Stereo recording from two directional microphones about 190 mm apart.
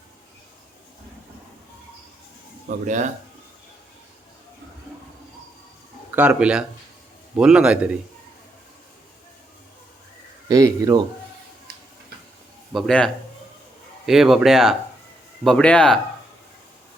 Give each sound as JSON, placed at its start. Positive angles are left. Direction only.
{"t": 2.6, "sound": "speech", "side_deg": -40}
{"t": 6.1, "sound": "speech", "side_deg": -5}
{"t": 10.5, "sound": "speech", "side_deg": -20}
{"t": 12.7, "sound": "speech", "side_deg": 5}
{"t": 14.1, "sound": "speech", "side_deg": 0}